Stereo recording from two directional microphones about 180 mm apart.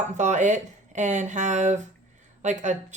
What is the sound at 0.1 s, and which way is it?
Speech, 40° right (ahead or behind).